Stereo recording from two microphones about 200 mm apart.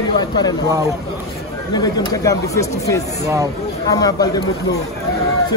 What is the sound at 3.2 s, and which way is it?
Speech, 15° right (ahead or behind).